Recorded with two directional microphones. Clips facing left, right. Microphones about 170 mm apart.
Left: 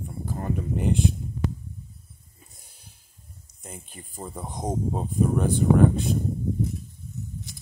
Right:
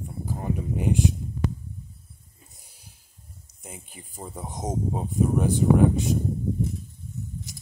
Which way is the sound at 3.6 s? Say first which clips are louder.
Left 1 dB; 10° right (ahead or behind).